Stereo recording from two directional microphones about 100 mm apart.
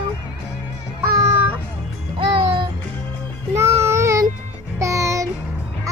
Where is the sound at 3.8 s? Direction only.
30° right (ahead or behind).